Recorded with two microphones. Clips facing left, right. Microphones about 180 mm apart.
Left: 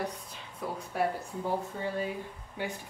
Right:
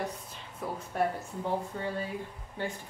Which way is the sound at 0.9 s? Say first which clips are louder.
Even; 5° left (ahead or behind).